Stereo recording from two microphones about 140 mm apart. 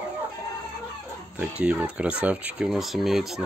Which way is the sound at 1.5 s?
10° right (ahead or behind).